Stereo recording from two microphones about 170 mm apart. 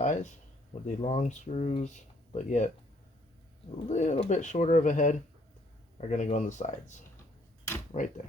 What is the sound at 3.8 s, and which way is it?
Speech, 45° left (ahead or behind).